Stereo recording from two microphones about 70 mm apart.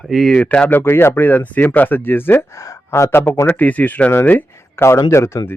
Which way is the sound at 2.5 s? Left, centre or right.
Left.